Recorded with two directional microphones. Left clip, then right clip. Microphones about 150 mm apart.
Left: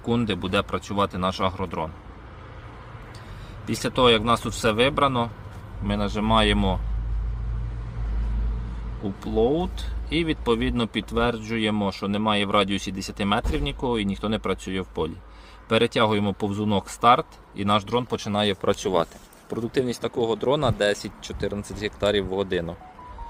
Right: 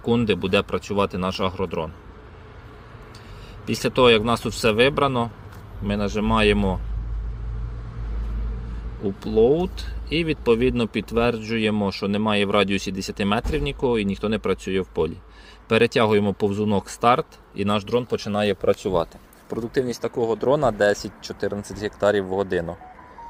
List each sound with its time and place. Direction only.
0.0 s speech: 25° right (ahead or behind)
3.7 s speech: 25° right (ahead or behind)
9.0 s speech: 20° right (ahead or behind)
18.6 s speech: 15° left (ahead or behind)
19.5 s speech: centre (ahead or behind)